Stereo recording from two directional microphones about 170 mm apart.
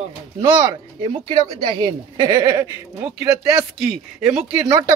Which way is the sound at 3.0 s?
10° right (ahead or behind).